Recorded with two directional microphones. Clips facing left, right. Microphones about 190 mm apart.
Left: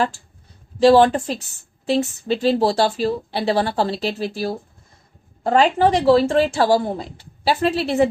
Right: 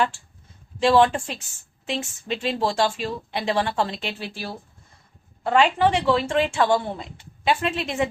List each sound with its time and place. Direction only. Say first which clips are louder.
0.8 s a woman's voice: left 5 dB; 35° left (ahead or behind)
5.4 s a woman's voice: left 3 dB; 40° left (ahead or behind)